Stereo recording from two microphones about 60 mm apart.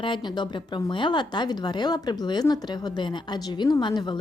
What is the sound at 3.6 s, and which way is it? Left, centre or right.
Speech, left.